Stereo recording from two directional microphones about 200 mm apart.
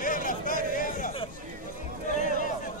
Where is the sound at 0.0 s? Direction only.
45° left (ahead or behind).